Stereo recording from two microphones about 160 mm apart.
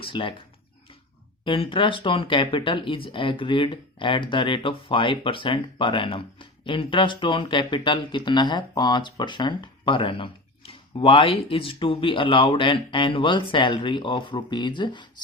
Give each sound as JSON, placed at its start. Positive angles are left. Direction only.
{"t": 0.0, "sound": "speech", "side_deg": 35}
{"t": 1.5, "sound": "speech", "side_deg": 35}